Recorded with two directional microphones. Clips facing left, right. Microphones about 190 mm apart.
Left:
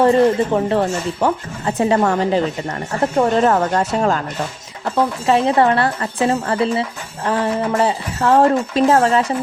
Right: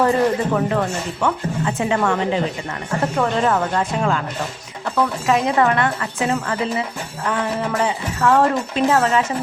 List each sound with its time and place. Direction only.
0.0 s speech: 30° left (ahead or behind)
4.9 s speech: 30° left (ahead or behind)